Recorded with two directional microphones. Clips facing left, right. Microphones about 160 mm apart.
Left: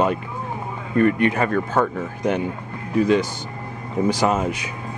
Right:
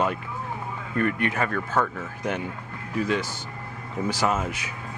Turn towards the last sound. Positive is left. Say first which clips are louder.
# left 5 dB
turn(degrees=20)  # may be behind; listen again after turning